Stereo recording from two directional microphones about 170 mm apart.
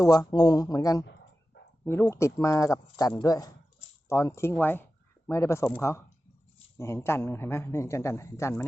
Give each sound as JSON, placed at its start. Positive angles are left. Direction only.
{"t": 0.0, "sound": "a man's voice", "side_deg": 20}
{"t": 6.7, "sound": "a man's voice", "side_deg": 15}